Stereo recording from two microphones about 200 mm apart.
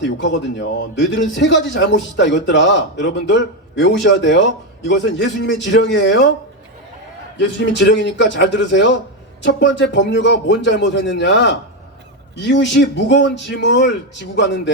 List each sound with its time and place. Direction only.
0.0 s a man's voice: 65° left (ahead or behind)
7.3 s a man's voice: 60° left (ahead or behind)